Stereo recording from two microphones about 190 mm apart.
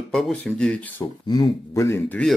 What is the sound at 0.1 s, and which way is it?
Speech, 5° left (ahead or behind).